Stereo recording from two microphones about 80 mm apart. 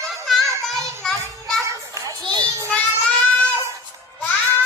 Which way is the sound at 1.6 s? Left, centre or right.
Right.